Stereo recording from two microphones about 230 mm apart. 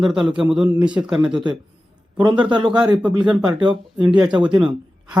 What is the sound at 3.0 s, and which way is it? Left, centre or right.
A man's voice, centre.